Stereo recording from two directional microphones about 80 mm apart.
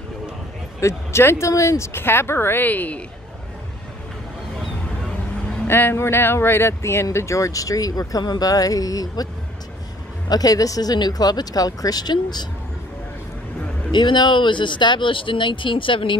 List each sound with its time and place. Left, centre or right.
0.7 s speech: left
5.7 s speech: left
10.3 s speech: left
13.9 s speech: left